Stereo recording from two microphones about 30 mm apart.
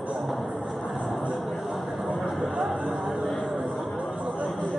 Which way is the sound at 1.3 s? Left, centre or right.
Centre.